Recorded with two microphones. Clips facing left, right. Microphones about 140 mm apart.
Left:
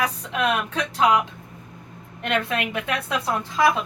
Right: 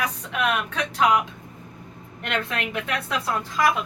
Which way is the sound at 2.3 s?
20° left (ahead or behind).